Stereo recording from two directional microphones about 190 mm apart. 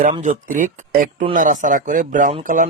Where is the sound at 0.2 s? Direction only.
40° right (ahead or behind).